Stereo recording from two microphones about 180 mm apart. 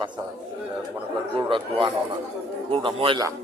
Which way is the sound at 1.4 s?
30° right (ahead or behind).